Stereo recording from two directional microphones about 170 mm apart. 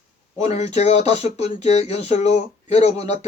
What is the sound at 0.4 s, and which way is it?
Speech, 40° left (ahead or behind).